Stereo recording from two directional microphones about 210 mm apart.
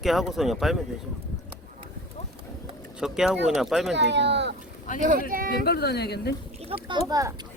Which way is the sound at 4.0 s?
55° right (ahead or behind).